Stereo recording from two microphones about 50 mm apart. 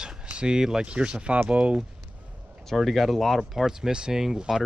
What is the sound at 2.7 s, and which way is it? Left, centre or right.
Speech, centre.